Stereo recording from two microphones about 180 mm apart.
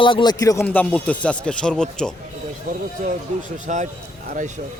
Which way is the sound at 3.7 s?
40° right (ahead or behind).